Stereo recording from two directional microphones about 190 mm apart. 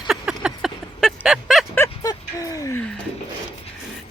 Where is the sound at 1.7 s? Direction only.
15° left (ahead or behind).